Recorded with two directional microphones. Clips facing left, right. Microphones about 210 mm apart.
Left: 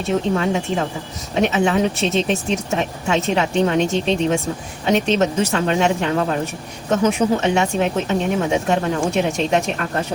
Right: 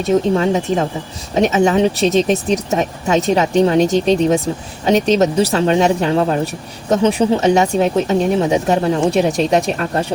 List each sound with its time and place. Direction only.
0.0 s speech: 40° right (ahead or behind)
1.7 s speech: 30° right (ahead or behind)